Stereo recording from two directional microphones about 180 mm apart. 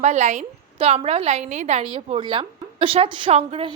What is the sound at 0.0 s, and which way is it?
A woman's voice, 40° right (ahead or behind).